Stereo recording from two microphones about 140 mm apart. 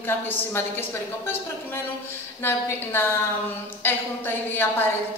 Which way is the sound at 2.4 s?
15° left (ahead or behind).